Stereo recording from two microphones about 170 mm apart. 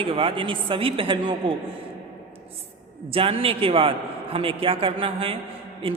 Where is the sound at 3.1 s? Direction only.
35° right (ahead or behind).